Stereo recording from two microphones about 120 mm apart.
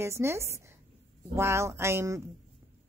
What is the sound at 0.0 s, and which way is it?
A woman's voice, 20° right (ahead or behind).